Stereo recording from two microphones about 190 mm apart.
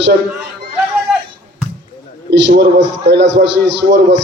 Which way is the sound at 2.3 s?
65° right (ahead or behind).